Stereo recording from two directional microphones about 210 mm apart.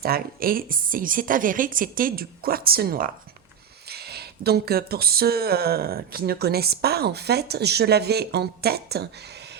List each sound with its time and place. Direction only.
0.0 s speech: 45° right (ahead or behind)